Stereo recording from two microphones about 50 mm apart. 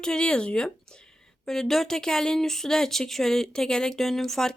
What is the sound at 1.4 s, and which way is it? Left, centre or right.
Speech, centre.